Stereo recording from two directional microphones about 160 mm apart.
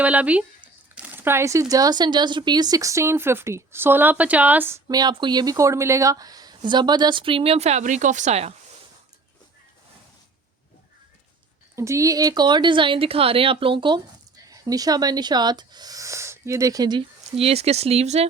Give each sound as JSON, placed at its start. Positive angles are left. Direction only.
{"t": 0.0, "sound": "speech", "side_deg": -10}
{"t": 4.9, "sound": "speech", "side_deg": -25}
{"t": 11.8, "sound": "speech", "side_deg": -20}